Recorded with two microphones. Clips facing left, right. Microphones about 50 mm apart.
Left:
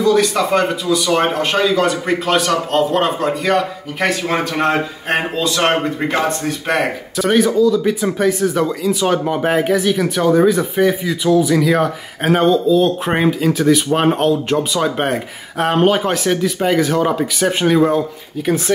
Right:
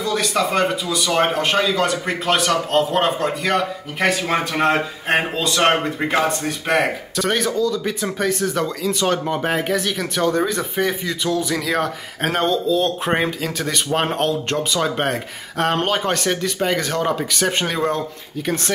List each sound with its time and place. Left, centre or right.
0.0 s speech: centre